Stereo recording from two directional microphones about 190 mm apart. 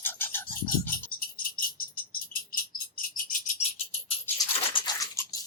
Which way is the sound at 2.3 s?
50° left (ahead or behind).